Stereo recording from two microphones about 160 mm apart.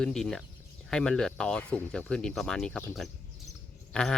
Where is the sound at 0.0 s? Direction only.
5° left (ahead or behind).